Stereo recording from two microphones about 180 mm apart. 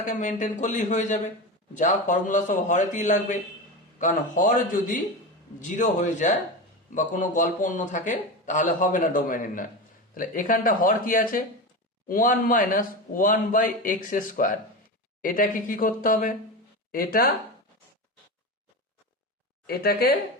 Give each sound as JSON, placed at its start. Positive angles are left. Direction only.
{"t": 0.0, "sound": "a man's voice", "side_deg": 45}
{"t": 19.6, "sound": "speech", "side_deg": 60}